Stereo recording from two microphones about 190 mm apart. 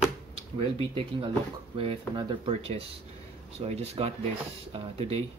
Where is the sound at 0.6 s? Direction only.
25° right (ahead or behind).